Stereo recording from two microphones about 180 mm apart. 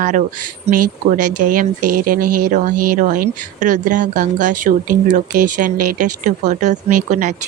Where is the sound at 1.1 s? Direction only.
50° right (ahead or behind).